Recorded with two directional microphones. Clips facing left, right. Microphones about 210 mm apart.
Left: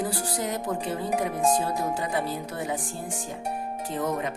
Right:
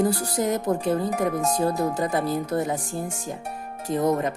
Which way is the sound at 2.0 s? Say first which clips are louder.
Right 5 dB; 40° right (ahead or behind).